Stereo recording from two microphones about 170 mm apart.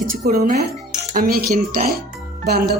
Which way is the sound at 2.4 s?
70° right (ahead or behind).